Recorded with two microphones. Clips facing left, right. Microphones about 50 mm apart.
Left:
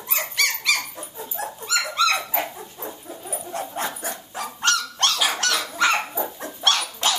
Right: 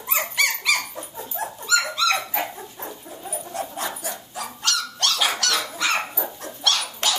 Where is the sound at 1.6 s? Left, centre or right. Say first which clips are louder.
Even; left.